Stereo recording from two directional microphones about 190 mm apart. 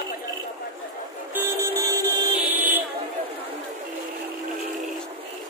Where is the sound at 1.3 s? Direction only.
15° right (ahead or behind).